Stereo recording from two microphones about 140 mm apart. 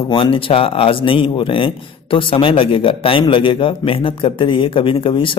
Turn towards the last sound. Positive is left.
turn(degrees=40)  # may be behind; listen again after turning